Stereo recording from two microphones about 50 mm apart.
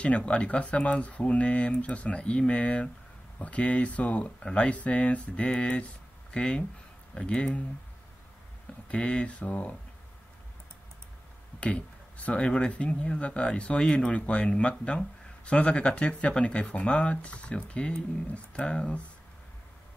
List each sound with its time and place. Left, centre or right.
0.0 s speech: left
8.8 s speech: left
11.6 s speech: left